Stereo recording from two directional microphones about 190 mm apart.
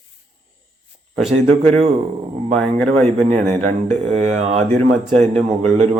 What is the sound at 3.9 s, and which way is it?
Speech, 35° right (ahead or behind).